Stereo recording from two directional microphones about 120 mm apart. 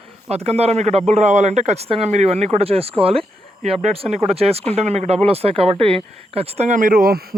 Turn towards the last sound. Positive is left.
turn(degrees=-80)